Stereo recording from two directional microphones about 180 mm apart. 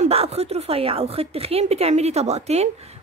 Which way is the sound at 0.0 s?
35° right (ahead or behind).